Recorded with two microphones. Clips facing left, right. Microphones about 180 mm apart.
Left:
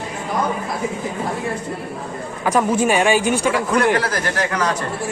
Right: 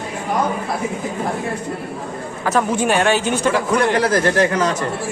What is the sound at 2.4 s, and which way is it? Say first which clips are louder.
Speech: left 1 dB; 10° left (ahead or behind).